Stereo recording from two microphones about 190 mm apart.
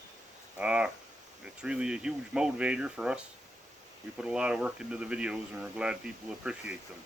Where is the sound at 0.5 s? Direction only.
5° right (ahead or behind).